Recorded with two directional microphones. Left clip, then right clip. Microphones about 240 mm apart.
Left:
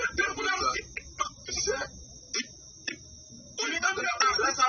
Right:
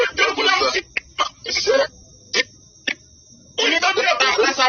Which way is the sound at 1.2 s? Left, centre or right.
Right.